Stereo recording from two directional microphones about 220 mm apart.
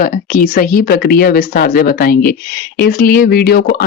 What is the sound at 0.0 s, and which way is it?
Speech, 35° left (ahead or behind).